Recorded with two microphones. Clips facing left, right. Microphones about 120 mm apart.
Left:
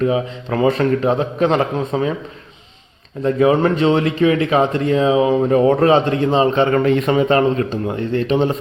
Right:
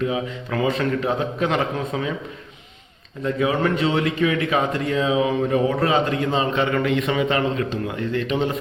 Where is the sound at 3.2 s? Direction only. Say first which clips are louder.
Left 7 dB; 40° left (ahead or behind).